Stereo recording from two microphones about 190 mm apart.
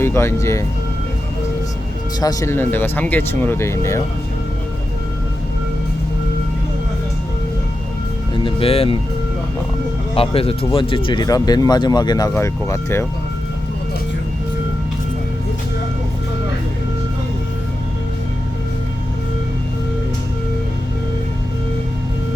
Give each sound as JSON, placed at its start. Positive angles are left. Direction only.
{"t": 0.0, "sound": "speech", "side_deg": 15}
{"t": 2.2, "sound": "speech", "side_deg": 15}
{"t": 8.4, "sound": "speech", "side_deg": 30}
{"t": 10.2, "sound": "speech", "side_deg": 30}